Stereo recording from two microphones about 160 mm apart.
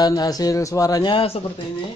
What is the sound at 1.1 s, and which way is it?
Speech, 35° left (ahead or behind).